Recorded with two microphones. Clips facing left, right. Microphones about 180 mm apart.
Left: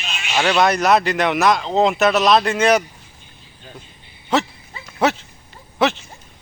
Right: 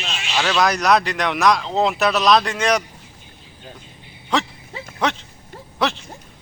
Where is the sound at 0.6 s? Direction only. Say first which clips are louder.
Left 1 dB; centre (ahead or behind).